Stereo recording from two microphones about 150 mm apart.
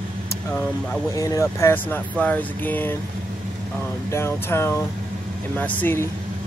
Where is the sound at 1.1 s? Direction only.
20° left (ahead or behind).